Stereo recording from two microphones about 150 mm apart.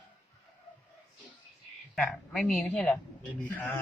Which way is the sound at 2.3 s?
5° left (ahead or behind).